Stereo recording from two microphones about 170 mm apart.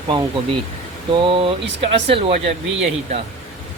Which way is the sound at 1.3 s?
30° right (ahead or behind).